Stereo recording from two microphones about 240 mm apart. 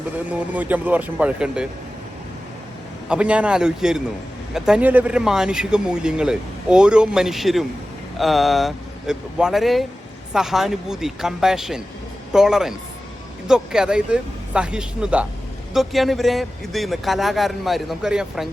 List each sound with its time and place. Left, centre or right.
0.3 s speech: centre
3.1 s speech: centre